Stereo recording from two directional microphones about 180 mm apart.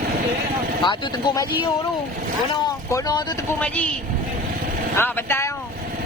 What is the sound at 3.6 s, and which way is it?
Speech, 5° left (ahead or behind).